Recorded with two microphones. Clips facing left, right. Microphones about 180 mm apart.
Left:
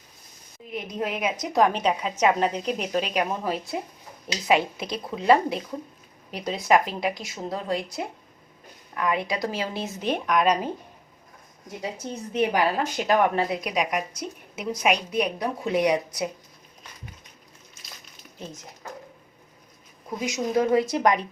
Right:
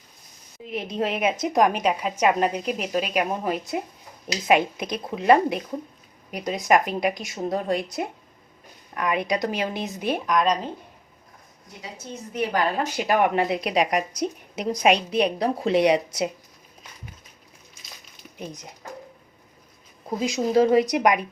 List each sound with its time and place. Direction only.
0.6 s a woman's voice: 25° right (ahead or behind); by 10.7 s 10° left (ahead or behind)
12.3 s a woman's voice: 25° left (ahead or behind)
12.5 s speech: 5° left (ahead or behind); by 16.3 s 25° right (ahead or behind)
18.3 s a woman's voice: 15° right (ahead or behind)
20.1 s speech: 30° right (ahead or behind); by 21.2 s 10° right (ahead or behind)